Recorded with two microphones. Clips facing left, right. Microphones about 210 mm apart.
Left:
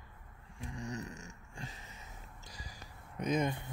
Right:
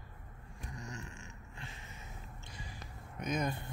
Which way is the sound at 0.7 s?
35° left (ahead or behind).